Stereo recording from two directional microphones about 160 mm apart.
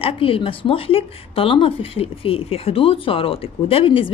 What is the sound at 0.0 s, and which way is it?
Speech, 35° left (ahead or behind).